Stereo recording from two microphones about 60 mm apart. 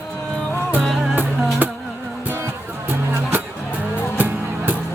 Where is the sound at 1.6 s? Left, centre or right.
Right.